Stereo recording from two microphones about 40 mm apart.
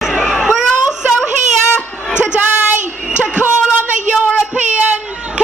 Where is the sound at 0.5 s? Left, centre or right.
Centre.